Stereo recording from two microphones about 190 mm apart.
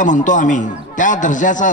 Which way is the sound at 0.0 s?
40° left (ahead or behind).